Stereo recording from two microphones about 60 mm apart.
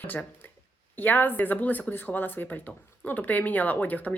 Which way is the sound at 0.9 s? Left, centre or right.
Left.